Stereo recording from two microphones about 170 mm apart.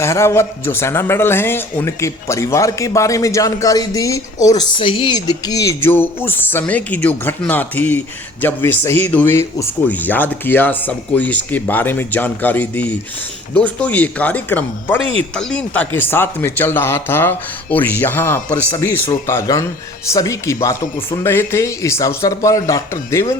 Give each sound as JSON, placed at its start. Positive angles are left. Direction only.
{"t": 0.0, "sound": "a man's voice", "side_deg": 15}